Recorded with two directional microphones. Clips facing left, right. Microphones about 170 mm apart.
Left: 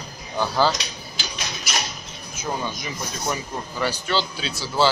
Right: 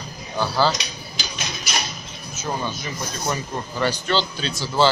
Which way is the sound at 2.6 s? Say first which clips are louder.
Right 1 dB; 10° left (ahead or behind).